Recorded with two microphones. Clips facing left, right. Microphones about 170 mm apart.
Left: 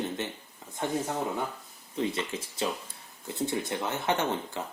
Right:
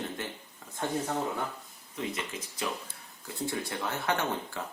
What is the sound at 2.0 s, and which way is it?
Speech, 30° left (ahead or behind).